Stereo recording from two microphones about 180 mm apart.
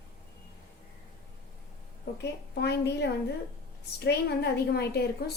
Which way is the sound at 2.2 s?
65° left (ahead or behind).